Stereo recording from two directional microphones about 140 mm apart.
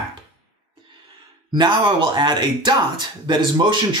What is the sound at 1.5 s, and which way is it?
Speech, 35° right (ahead or behind).